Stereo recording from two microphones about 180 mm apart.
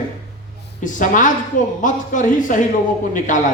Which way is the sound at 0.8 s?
45° left (ahead or behind).